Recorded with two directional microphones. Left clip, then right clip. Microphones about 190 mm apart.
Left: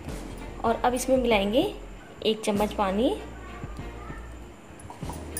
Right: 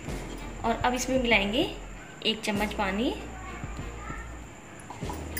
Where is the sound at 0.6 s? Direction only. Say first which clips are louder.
Left 3 dB; 50° left (ahead or behind).